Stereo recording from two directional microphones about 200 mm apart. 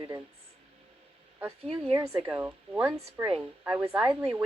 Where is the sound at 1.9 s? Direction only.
10° right (ahead or behind).